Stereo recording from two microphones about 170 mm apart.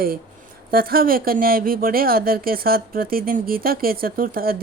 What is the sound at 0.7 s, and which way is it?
Speech, 60° right (ahead or behind).